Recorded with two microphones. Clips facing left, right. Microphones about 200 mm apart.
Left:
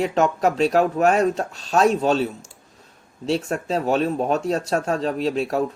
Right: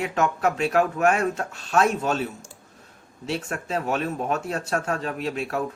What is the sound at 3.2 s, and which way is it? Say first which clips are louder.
Speech: left 6 dB; 30° left (ahead or behind).